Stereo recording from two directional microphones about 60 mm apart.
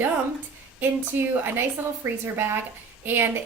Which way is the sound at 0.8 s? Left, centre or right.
Right.